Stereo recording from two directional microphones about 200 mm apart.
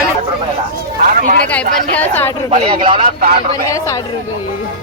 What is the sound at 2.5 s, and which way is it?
Speech, 25° right (ahead or behind).